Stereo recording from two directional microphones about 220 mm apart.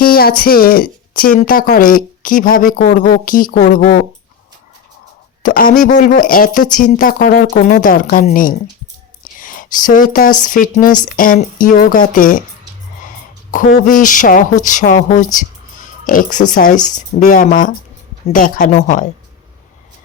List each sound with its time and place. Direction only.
0.0 s a woman's voice: 45° left (ahead or behind)
5.4 s a woman's voice: 40° left (ahead or behind)
13.5 s a woman's voice: 40° left (ahead or behind)